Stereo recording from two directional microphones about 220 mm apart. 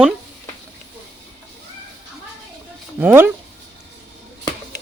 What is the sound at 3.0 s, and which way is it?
Speech, 10° right (ahead or behind).